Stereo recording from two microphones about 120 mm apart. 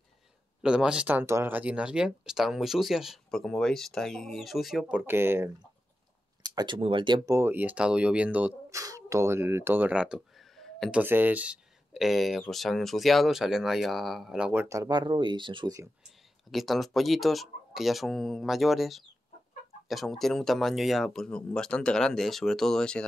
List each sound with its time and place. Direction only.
0.6 s speech: 5° right (ahead or behind)
6.5 s speech: 40° right (ahead or behind)
7.2 s speech: 20° right (ahead or behind)
8.6 s speech: 25° right (ahead or behind); by 10.9 s centre (ahead or behind)
10.9 s speech: 15° right (ahead or behind)
14.7 s speech: 30° right (ahead or behind)
16.0 s speech: centre (ahead or behind)